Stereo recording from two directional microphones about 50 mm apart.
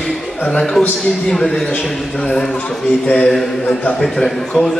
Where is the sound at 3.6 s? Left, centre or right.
Left.